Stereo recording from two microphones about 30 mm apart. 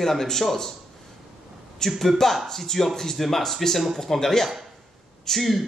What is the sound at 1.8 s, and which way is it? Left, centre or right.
A man's voice, centre.